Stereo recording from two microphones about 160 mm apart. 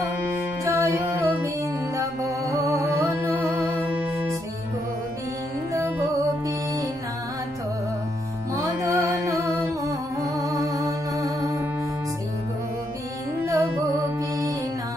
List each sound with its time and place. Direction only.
0.7 s music: 15° right (ahead or behind)
5.7 s music: 20° right (ahead or behind)
8.8 s music: 20° right (ahead or behind)
13.5 s music: 20° right (ahead or behind)